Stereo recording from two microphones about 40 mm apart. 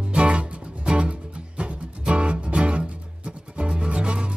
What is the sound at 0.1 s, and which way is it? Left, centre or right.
Music, right.